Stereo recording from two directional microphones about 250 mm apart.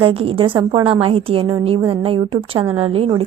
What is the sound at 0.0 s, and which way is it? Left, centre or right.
A woman's voice, right.